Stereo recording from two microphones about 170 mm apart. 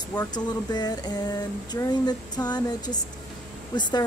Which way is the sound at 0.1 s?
25° left (ahead or behind).